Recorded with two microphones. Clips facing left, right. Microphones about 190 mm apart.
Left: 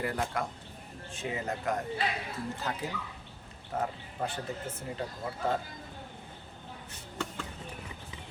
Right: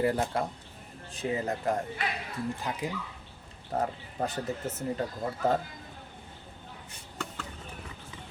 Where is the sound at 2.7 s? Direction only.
15° right (ahead or behind).